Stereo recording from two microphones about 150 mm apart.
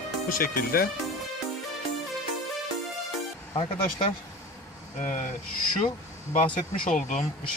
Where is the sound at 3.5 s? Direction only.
35° left (ahead or behind).